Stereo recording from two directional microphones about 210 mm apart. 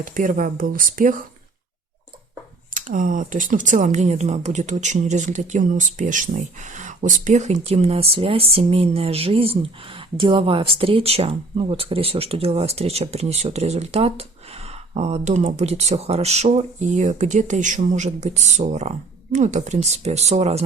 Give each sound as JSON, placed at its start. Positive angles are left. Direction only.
{"t": 0.0, "sound": "speech", "side_deg": -40}
{"t": 2.7, "sound": "speech", "side_deg": -40}